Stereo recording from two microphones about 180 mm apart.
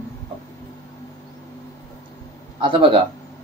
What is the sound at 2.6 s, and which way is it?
Speech, 30° right (ahead or behind).